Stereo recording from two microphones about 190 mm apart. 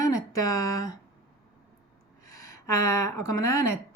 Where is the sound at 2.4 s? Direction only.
15° left (ahead or behind).